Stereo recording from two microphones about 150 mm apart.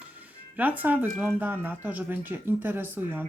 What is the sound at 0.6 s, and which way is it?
Speech, 10° right (ahead or behind).